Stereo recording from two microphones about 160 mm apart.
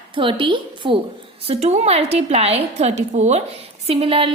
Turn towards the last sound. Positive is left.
turn(degrees=-35)  # may be behind; listen again after turning